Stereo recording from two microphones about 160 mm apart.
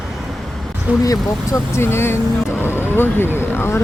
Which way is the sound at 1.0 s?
20° left (ahead or behind).